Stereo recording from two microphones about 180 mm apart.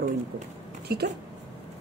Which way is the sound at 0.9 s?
60° right (ahead or behind).